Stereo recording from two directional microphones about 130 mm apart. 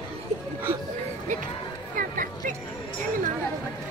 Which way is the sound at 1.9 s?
90° right.